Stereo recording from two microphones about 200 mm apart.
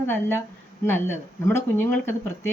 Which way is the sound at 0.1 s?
10° left (ahead or behind).